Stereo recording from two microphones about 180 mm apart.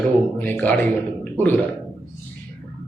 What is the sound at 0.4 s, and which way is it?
Speech, 10° left (ahead or behind).